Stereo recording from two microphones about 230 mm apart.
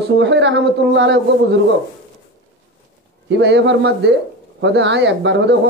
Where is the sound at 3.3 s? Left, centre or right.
Right.